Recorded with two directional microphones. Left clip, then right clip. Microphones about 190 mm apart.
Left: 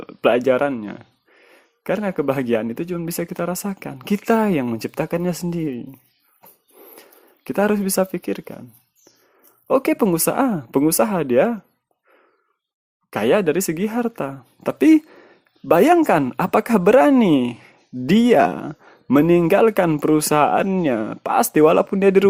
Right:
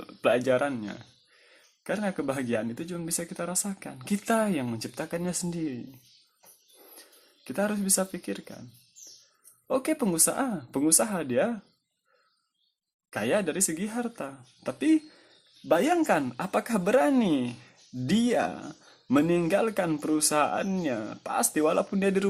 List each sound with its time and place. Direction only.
0.0 s speech: 35° left (ahead or behind)
6.4 s a sound: 35° left (ahead or behind)
9.6 s speech: 40° left (ahead or behind)
13.1 s speech: 45° left (ahead or behind)